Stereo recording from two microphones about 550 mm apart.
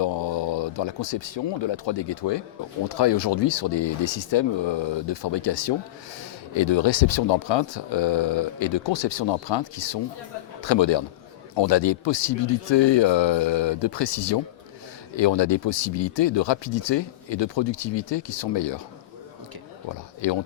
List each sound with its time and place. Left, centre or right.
0.0 s speech: left